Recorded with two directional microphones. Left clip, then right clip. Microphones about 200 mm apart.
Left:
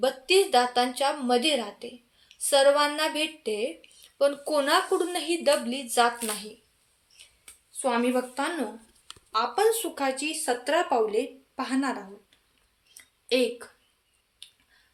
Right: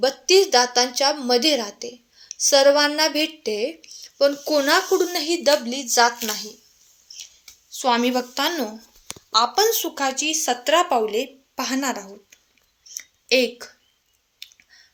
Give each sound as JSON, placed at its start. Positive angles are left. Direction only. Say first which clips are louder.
{"t": 0.0, "sound": "a woman's voice", "louder": "right 6 dB", "side_deg": -35}
{"t": 7.1, "sound": "a sound", "louder": "right 14 dB", "side_deg": -40}
{"t": 7.8, "sound": "a woman's voice", "louder": "right 5 dB", "side_deg": -50}